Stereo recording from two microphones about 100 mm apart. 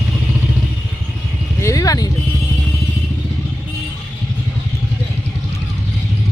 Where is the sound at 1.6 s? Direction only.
35° left (ahead or behind).